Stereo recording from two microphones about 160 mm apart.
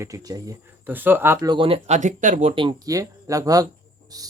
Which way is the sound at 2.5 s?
30° right (ahead or behind).